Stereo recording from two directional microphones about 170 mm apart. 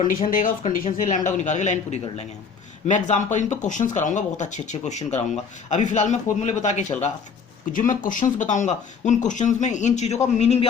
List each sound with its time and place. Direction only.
0.0 s a man's voice: 55° left (ahead or behind)